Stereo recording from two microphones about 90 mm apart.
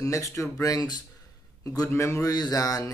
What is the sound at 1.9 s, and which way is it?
Speech, 30° left (ahead or behind).